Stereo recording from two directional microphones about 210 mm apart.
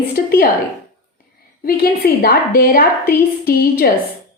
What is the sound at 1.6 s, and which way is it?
A woman's voice, 45° left (ahead or behind).